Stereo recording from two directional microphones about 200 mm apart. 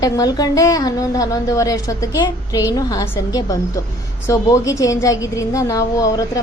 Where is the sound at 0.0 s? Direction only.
20° left (ahead or behind).